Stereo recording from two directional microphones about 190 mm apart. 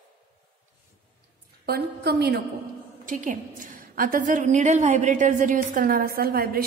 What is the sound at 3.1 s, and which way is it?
A woman's voice, 45° right (ahead or behind).